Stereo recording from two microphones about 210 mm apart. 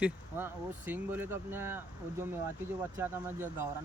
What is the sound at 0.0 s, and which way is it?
Speech, 10° right (ahead or behind).